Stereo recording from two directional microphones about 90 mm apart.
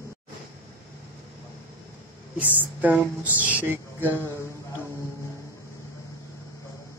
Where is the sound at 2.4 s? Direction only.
20° right (ahead or behind).